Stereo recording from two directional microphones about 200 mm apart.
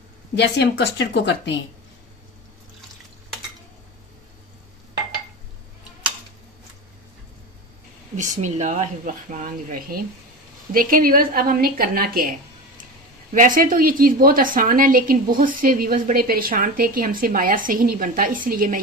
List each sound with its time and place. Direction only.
0.4 s speech: 60° left (ahead or behind)
8.2 s a woman's voice: 35° right (ahead or behind)